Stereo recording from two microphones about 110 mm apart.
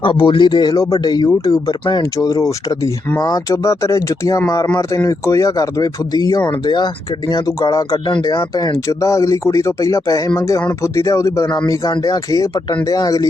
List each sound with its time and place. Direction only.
0.0 s speech: 55° left (ahead or behind); by 11.4 s 25° left (ahead or behind)
11.4 s speech: 40° left (ahead or behind)